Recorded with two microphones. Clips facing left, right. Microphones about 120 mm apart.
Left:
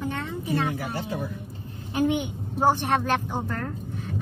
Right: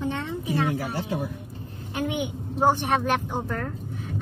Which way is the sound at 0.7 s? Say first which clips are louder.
Right 2 dB; 70° right (ahead or behind).